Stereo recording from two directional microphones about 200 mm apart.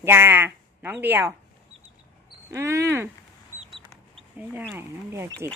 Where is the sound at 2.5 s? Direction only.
15° right (ahead or behind).